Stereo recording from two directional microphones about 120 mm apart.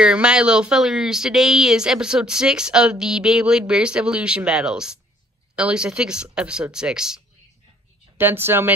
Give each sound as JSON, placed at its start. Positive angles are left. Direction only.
{"t": 0.0, "sound": "speech", "side_deg": -5}
{"t": 8.2, "sound": "speech", "side_deg": -20}